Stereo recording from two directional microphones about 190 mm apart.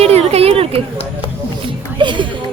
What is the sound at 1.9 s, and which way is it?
Speech, 25° right (ahead or behind).